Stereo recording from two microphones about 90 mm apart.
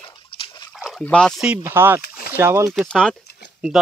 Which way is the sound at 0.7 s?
5° right (ahead or behind).